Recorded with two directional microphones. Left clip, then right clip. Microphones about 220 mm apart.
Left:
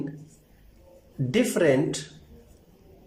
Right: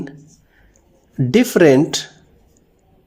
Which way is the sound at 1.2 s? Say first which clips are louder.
Right 10 dB; 50° right (ahead or behind).